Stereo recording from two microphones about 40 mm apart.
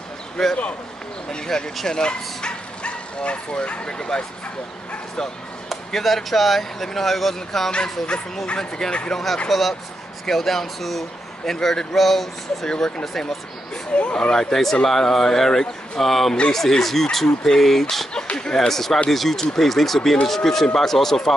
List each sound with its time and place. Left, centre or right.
0.4 s speech: centre
1.9 s speech: left
5.9 s speech: centre
12.6 s speech: centre
13.9 s speech: left
14.3 s speech: centre